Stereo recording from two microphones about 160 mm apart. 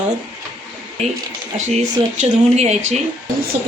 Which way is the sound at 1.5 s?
45° right (ahead or behind).